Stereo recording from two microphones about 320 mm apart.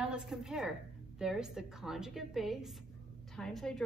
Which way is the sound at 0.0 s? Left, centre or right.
Centre.